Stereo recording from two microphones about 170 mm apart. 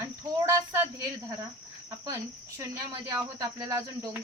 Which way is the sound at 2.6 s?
20° right (ahead or behind).